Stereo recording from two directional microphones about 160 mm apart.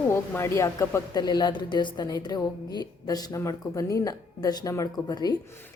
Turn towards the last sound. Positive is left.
turn(degrees=25)  # may be behind; listen again after turning